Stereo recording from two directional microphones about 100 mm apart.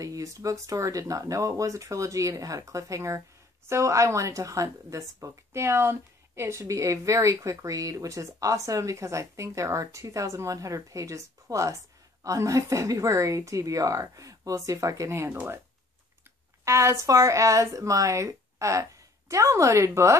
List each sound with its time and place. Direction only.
0.0 s speech: 35° right (ahead or behind)
16.6 s speech: 30° right (ahead or behind)